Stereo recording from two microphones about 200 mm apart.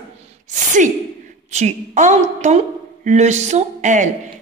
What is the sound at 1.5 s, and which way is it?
Speech, 35° right (ahead or behind).